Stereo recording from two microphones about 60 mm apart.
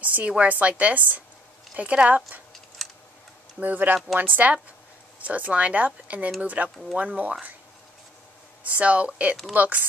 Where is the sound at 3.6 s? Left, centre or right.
Right.